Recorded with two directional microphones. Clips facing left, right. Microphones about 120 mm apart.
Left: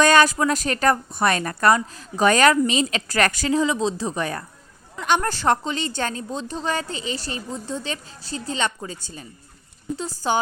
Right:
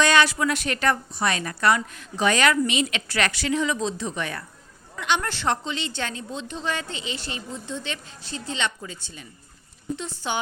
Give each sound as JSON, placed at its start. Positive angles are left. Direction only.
{"t": 0.0, "sound": "a woman's voice", "side_deg": 45}